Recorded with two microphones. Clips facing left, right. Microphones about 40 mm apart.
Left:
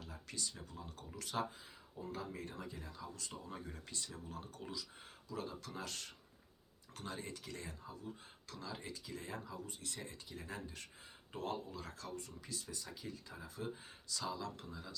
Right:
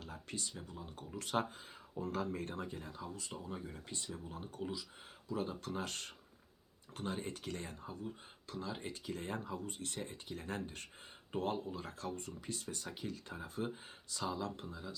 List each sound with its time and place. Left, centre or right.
0.3 s speech: right
0.7 s speech: centre
1.1 s speech: right
1.5 s speech: right
3.4 s speech: centre
3.8 s speech: right
8.4 s speech: right
11.3 s speech: right
14.7 s speech: centre